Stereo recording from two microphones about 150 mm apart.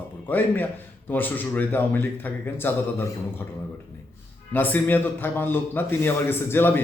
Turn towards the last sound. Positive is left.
turn(degrees=15)  # may be behind; listen again after turning